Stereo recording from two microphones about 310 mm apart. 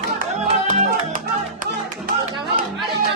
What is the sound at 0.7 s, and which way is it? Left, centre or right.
Music, right.